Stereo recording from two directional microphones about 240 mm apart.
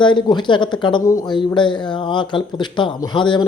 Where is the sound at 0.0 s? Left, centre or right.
Centre.